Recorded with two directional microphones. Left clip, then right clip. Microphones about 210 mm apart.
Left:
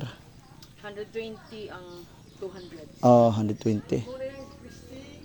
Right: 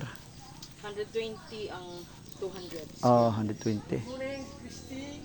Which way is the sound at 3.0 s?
60° left (ahead or behind).